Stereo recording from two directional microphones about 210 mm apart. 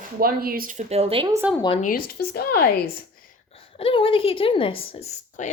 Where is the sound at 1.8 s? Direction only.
40° left (ahead or behind).